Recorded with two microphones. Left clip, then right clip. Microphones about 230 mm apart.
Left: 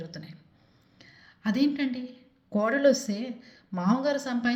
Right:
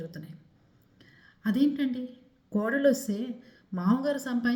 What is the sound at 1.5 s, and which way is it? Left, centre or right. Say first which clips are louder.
A woman's voice: even; left.